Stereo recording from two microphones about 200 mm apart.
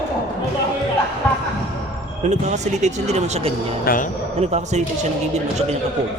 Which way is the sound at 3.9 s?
45° left (ahead or behind).